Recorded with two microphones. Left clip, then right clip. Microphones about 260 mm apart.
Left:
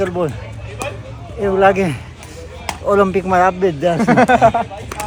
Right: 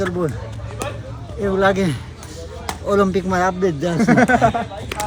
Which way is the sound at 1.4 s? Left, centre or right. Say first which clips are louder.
Left 4 dB; centre.